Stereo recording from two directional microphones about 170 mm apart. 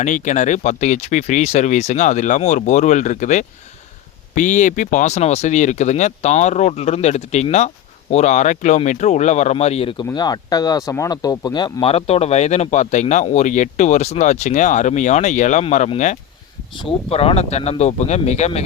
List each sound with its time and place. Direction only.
0.0 s speech: 45° left (ahead or behind)
10.1 s speech: 20° left (ahead or behind); by 18.6 s 40° left (ahead or behind)